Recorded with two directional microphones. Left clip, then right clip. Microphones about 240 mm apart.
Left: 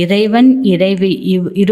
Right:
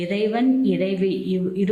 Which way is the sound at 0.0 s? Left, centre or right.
Left.